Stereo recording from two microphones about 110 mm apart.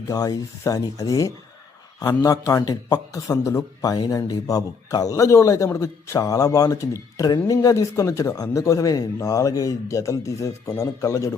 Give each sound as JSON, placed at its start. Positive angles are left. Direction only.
{"t": 0.1, "sound": "a man's voice", "side_deg": 35}